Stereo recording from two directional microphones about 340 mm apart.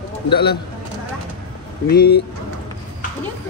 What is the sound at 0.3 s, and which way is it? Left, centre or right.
Speech, left.